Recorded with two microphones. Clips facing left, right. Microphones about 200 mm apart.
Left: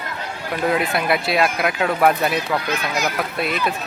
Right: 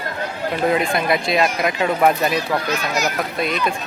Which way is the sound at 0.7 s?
5° left (ahead or behind).